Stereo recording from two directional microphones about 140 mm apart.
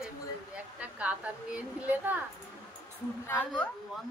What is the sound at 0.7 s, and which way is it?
Speech, 10° right (ahead or behind).